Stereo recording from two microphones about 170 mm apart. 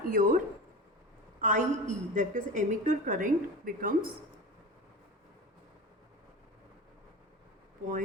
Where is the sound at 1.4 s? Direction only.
50° right (ahead or behind).